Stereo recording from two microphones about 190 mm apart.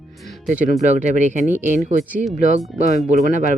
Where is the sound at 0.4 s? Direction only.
40° right (ahead or behind).